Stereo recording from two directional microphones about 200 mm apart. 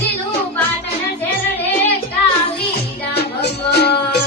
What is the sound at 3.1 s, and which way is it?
Music, 55° left (ahead or behind).